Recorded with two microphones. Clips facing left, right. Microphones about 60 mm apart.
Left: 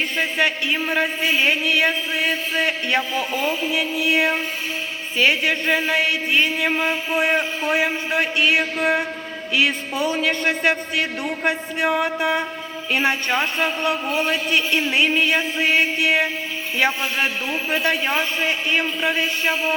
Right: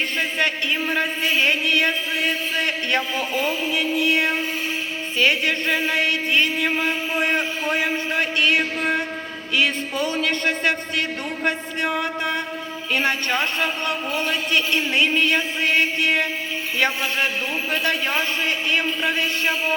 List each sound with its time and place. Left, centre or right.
0.2 s speech: centre
17.7 s speech: centre